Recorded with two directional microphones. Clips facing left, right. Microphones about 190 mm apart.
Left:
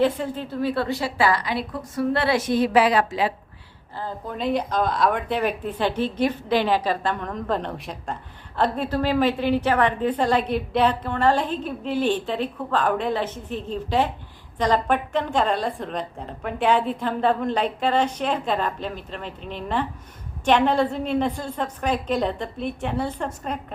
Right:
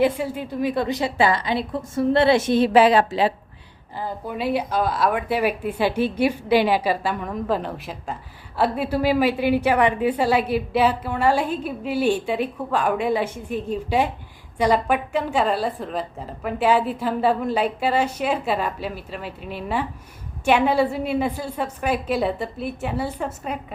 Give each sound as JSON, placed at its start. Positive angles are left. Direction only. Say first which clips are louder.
{"t": 0.0, "sound": "a woman's voice", "louder": "right 1 dB", "side_deg": -10}
{"t": 3.9, "sound": "speech", "louder": "right 2 dB", "side_deg": -10}